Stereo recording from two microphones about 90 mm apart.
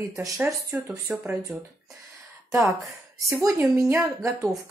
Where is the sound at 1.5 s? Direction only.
5° left (ahead or behind).